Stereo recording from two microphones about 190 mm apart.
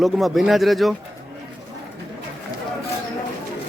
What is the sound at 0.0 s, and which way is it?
Speech, centre (ahead or behind).